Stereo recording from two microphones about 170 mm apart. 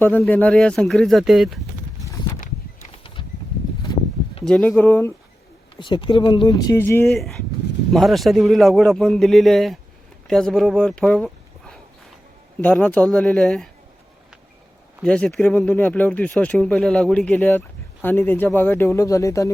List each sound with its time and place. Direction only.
0.2 s speech: 10° left (ahead or behind)
2.9 s a sound: 30° left (ahead or behind)
4.4 s speech: 5° left (ahead or behind)
5.8 s speech: 30° left (ahead or behind)
7.1 s speech: centre (ahead or behind)
15.0 s speech: 5° left (ahead or behind)